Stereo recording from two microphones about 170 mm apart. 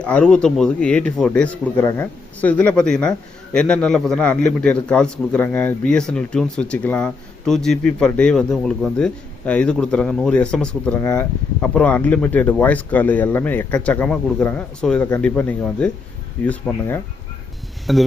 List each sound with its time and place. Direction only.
0.0 s speech: 5° left (ahead or behind)
11.0 s speech: 15° left (ahead or behind); by 18.0 s centre (ahead or behind)